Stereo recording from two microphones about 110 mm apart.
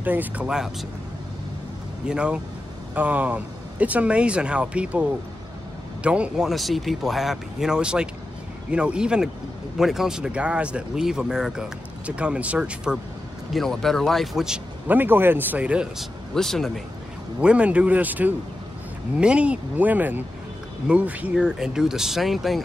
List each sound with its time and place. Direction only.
0.0 s speech: 15° right (ahead or behind)
2.0 s speech: 10° right (ahead or behind)
13.5 s speech: 5° left (ahead or behind)
14.9 s speech: 20° right (ahead or behind)
16.3 s speech: 5° left (ahead or behind)
17.4 s speech: 10° right (ahead or behind)